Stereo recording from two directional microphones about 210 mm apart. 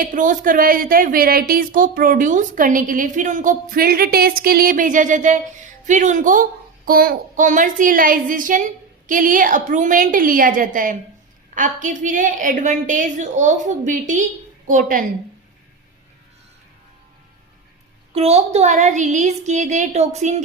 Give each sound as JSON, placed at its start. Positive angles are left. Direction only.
{"t": 0.0, "sound": "a woman's voice", "side_deg": -40}
{"t": 18.1, "sound": "a woman's voice", "side_deg": -30}